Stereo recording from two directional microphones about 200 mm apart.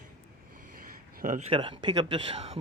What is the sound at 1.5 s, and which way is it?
Speech, 25° right (ahead or behind).